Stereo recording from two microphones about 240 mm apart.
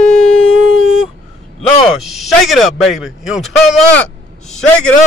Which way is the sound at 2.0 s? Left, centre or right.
Centre.